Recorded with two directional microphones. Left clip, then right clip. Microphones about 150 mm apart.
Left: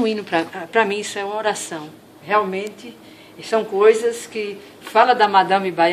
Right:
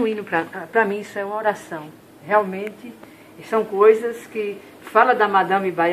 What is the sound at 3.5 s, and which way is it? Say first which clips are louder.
Speech: left 1 dB; 45° left (ahead or behind).